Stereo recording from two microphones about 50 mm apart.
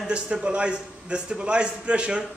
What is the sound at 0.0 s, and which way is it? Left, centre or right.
A man's voice, centre.